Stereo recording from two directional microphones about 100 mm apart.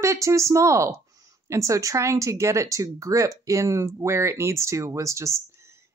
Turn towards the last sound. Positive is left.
turn(degrees=-30)  # may be behind; listen again after turning